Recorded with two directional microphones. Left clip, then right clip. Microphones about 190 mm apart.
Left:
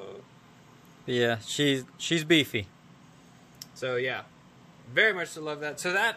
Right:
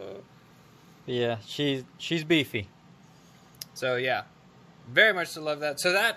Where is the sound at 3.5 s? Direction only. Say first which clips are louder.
Right 2 dB; 55° right (ahead or behind).